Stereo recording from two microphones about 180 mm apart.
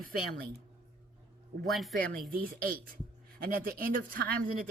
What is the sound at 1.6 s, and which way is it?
Speech, centre (ahead or behind).